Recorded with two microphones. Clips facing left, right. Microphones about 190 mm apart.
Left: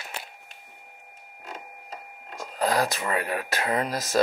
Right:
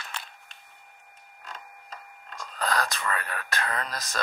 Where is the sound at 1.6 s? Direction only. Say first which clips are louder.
Left 4 dB; 20° left (ahead or behind).